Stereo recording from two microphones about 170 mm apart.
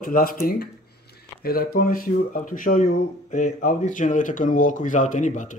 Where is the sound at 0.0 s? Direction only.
55° left (ahead or behind).